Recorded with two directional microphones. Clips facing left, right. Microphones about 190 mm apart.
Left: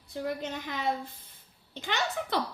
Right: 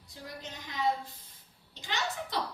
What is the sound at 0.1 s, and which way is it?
A woman's voice, 60° left (ahead or behind).